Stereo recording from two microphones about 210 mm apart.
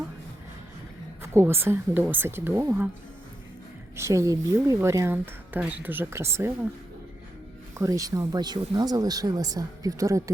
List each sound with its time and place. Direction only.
1.2 s speech: 10° right (ahead or behind)
3.9 s speech: 15° right (ahead or behind)
7.8 s speech: 15° right (ahead or behind)